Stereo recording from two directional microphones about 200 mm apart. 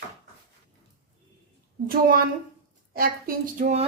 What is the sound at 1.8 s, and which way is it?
Speech, 45° right (ahead or behind).